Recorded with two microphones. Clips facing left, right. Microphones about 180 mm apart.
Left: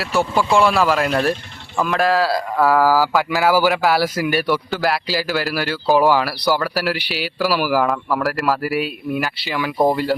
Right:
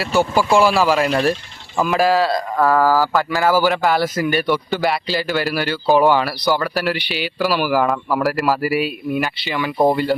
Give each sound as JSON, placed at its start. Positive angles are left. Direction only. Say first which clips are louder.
{"t": 0.0, "sound": "a man's voice", "louder": "right 2 dB", "side_deg": 0}